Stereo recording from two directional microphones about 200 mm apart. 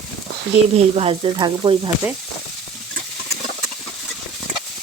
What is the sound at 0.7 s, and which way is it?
Sizzle, 30° right (ahead or behind).